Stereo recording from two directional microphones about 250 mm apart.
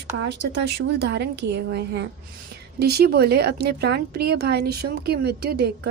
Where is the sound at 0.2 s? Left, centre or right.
Right.